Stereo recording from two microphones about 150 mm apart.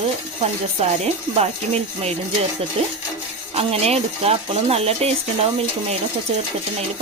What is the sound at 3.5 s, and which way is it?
Speech, 40° right (ahead or behind).